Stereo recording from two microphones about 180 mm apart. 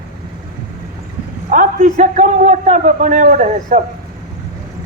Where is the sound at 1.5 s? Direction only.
45° right (ahead or behind).